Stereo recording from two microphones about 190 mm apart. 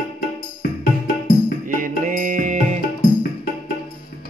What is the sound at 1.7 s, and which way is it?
Music, 45° right (ahead or behind).